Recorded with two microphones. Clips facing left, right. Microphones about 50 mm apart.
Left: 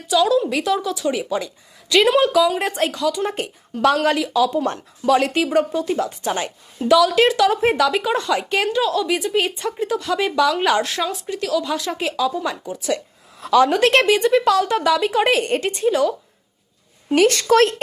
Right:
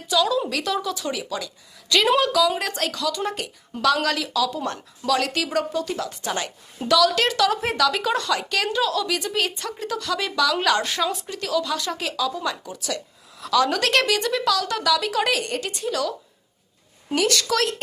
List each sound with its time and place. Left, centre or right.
0.1 s a woman's voice: centre
1.1 s a woman's voice: left
3.3 s a woman's voice: left; by 7.6 s centre
7.6 s a woman's voice: left
10.8 s speech: centre
11.9 s a woman's voice: centre
17.2 s a woman's voice: left